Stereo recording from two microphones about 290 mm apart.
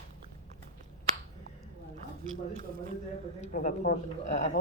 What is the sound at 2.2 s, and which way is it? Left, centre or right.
Speech, right.